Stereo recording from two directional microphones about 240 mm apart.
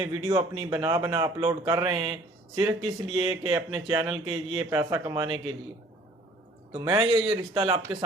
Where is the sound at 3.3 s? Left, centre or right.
Centre.